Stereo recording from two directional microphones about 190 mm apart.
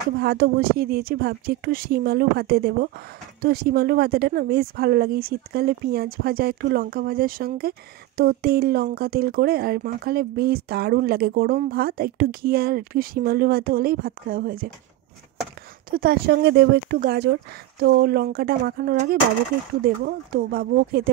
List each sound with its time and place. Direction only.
0.2 s speech: 55° right (ahead or behind)
15.9 s speech: 50° right (ahead or behind)